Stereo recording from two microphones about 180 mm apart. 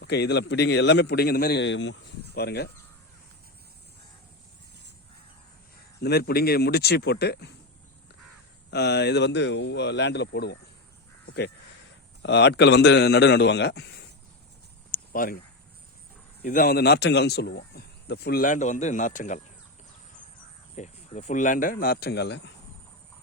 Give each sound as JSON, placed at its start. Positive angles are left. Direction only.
{"t": 0.0, "sound": "a man's voice", "side_deg": 65}
{"t": 6.0, "sound": "speech", "side_deg": 60}
{"t": 8.7, "sound": "a man's voice", "side_deg": 65}
{"t": 12.2, "sound": "a man's voice", "side_deg": 70}
{"t": 14.9, "sound": "a sound", "side_deg": 55}
{"t": 16.4, "sound": "speech", "side_deg": 55}
{"t": 20.7, "sound": "speech", "side_deg": 40}